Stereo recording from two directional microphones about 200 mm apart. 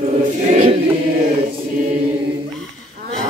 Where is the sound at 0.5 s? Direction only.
35° right (ahead or behind).